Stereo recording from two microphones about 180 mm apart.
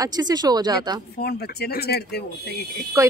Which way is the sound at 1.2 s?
60° left (ahead or behind).